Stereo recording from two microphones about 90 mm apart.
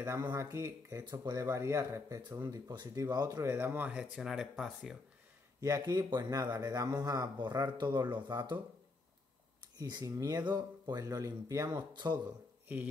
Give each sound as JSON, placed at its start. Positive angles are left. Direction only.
{"t": 0.3, "sound": "speech", "side_deg": -35}
{"t": 2.4, "sound": "a man's voice", "side_deg": -50}
{"t": 5.6, "sound": "a man's voice", "side_deg": -40}
{"t": 9.8, "sound": "speech", "side_deg": -45}
{"t": 11.9, "sound": "a man's voice", "side_deg": -55}